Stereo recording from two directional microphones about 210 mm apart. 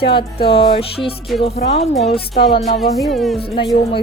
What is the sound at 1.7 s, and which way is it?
Speech, 30° left (ahead or behind).